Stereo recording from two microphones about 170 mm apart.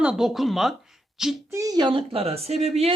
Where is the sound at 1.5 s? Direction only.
20° right (ahead or behind); by 2.9 s 35° right (ahead or behind).